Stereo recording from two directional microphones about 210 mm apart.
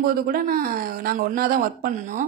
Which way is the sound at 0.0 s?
45° right (ahead or behind).